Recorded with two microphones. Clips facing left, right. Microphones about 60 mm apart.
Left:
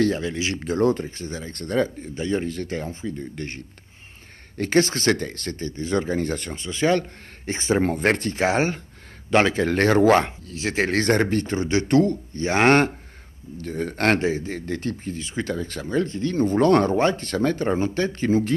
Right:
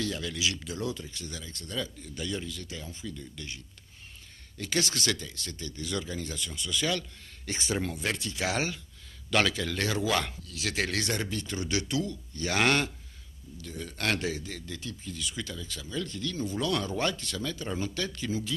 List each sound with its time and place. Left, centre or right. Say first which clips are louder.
0.0 s speech: left 9 dB; left
10.2 s speech: left 7 dB; left
11.9 s a man's voice: left 13 dB; left
12.4 s a man's voice: left 9 dB; left
15.1 s speech: left 10 dB; left